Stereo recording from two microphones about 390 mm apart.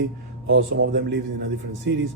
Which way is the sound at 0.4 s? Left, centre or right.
Right.